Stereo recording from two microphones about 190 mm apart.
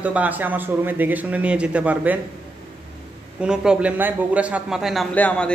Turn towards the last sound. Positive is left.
turn(degrees=5)  # may be behind; listen again after turning